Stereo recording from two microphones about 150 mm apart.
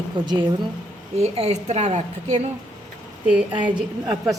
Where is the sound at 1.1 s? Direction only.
45° right (ahead or behind).